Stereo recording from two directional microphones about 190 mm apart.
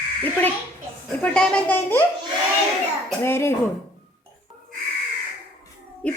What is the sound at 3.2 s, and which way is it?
Speech, 10° left (ahead or behind).